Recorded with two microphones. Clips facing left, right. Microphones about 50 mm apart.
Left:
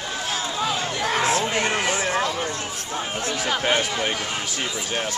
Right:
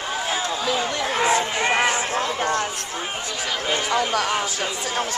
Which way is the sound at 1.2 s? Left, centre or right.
Centre.